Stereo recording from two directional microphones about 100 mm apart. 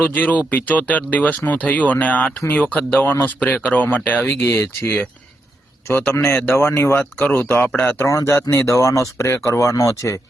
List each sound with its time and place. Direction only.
0.0 s speech: 15° left (ahead or behind); by 10.2 s 30° left (ahead or behind)